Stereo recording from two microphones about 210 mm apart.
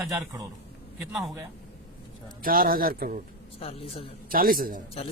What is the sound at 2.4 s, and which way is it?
Speech, 45° right (ahead or behind).